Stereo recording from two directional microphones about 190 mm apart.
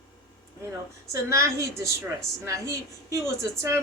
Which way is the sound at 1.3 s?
15° right (ahead or behind).